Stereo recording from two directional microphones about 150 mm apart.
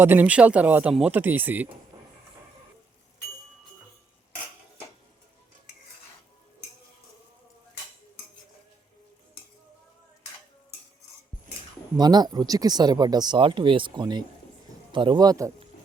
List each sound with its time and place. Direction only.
0.0 s speech: 15° right (ahead or behind)
11.9 s speech: 25° right (ahead or behind)